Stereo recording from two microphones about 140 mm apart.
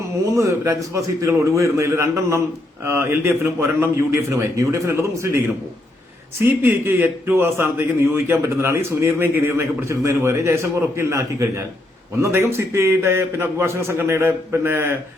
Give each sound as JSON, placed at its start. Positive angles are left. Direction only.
{"t": 0.3, "sound": "speech", "side_deg": -20}
{"t": 6.4, "sound": "a man's voice", "side_deg": -15}